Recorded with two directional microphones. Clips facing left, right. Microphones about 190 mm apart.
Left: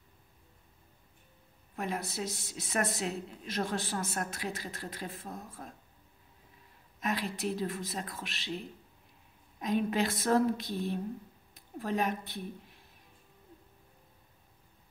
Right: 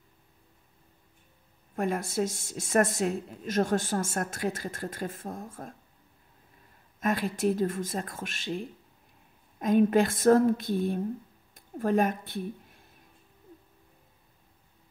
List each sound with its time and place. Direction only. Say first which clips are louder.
1.8 s a woman's voice: right 7 dB; 50° right (ahead or behind)
7.0 s a woman's voice: right 6 dB; 50° right (ahead or behind)
9.6 s a woman's voice: right 8 dB; 50° right (ahead or behind)